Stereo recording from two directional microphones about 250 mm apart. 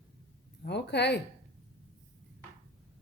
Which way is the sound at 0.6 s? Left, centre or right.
Left.